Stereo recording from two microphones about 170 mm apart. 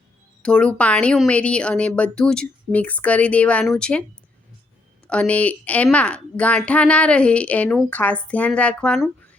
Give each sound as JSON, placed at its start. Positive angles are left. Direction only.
{"t": 0.4, "sound": "a woman's voice", "side_deg": 5}
{"t": 5.0, "sound": "a woman's voice", "side_deg": 5}